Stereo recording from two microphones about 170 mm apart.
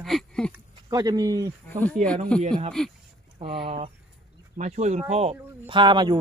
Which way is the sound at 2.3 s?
5° left (ahead or behind).